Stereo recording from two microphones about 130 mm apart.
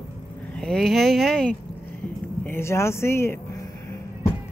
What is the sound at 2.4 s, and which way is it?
Speech, 20° left (ahead or behind).